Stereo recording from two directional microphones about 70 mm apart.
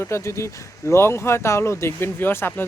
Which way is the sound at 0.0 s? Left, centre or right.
Left.